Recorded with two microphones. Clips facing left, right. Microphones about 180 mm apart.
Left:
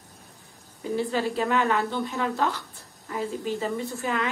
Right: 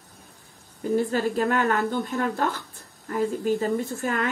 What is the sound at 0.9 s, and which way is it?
A woman's voice, 45° right (ahead or behind).